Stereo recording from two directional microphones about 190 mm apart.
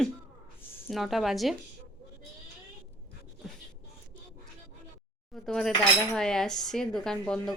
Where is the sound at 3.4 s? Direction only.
Centre (ahead or behind).